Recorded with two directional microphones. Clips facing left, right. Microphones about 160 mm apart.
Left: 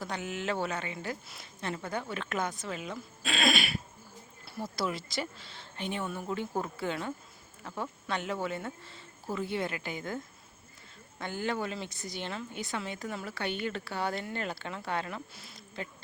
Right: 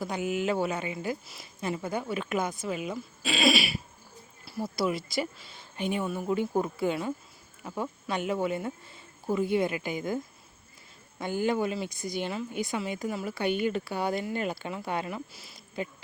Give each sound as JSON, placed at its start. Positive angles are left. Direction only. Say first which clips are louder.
{"t": 0.0, "sound": "speech", "louder": "right 6 dB", "side_deg": -10}
{"t": 11.2, "sound": "speech", "louder": "right 6 dB", "side_deg": -15}